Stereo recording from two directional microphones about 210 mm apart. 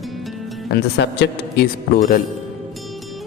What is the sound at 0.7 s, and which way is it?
Music, 50° left (ahead or behind).